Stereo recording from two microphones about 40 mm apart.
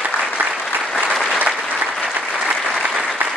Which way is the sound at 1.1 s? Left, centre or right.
Centre.